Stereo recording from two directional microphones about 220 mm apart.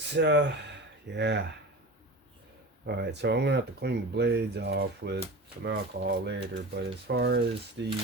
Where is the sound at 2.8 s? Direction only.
50° right (ahead or behind).